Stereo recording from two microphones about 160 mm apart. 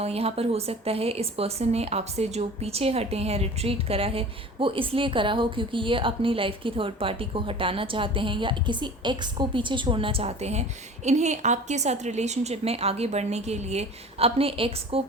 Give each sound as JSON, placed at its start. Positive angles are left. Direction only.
{"t": 0.0, "sound": "speech", "side_deg": -40}